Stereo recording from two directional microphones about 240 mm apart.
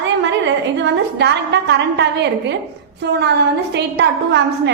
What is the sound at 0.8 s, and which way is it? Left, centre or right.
A woman's voice, right.